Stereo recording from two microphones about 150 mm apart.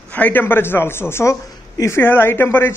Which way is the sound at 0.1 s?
10° left (ahead or behind).